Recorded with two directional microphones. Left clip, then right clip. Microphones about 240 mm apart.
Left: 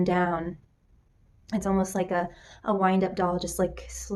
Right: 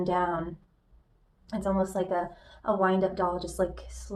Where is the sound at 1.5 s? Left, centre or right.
Left.